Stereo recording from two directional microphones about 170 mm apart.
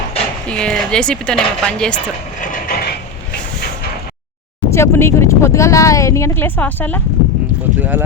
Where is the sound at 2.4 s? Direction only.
55° left (ahead or behind).